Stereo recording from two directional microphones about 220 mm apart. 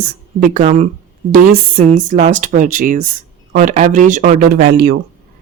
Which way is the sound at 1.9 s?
35° right (ahead or behind).